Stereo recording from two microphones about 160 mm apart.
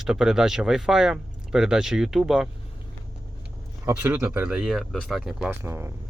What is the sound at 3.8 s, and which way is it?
Speech, 10° right (ahead or behind).